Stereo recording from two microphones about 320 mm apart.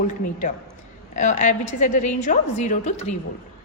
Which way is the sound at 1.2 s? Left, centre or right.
Left.